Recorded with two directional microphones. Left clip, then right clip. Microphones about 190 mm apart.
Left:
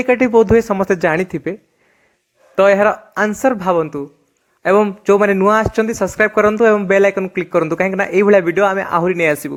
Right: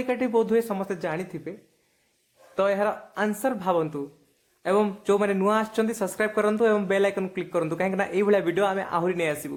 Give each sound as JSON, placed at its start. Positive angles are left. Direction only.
{"t": 0.0, "sound": "speech", "side_deg": 30}
{"t": 2.6, "sound": "a man's voice", "side_deg": 35}